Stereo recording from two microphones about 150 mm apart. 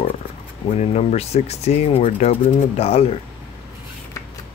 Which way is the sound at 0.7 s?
45° left (ahead or behind).